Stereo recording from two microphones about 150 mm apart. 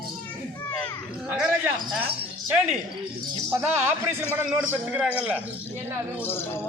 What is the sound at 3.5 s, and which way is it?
Speech, 15° right (ahead or behind).